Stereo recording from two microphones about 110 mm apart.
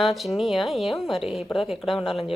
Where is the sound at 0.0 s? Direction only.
Centre (ahead or behind).